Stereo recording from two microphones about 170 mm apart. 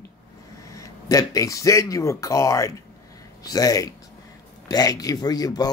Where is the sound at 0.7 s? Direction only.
20° left (ahead or behind).